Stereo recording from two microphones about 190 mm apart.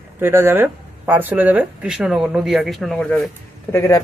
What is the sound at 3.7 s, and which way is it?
Speech, 15° left (ahead or behind).